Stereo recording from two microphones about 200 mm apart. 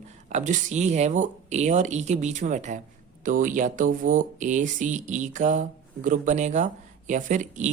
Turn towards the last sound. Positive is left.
turn(degrees=-40)  # may be behind; listen again after turning